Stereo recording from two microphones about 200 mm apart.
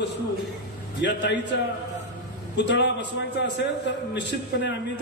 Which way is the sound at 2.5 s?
60° left (ahead or behind).